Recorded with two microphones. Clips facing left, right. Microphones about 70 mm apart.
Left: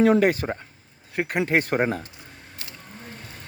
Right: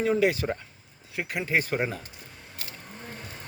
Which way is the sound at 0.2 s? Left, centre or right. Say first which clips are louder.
Left 3 dB; left.